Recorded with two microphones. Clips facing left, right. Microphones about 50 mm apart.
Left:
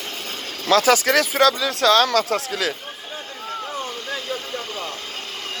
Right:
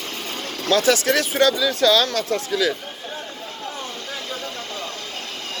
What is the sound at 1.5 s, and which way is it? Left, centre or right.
Speech, left.